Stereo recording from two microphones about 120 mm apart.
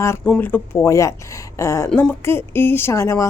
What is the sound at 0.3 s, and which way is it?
Speech, 15° left (ahead or behind).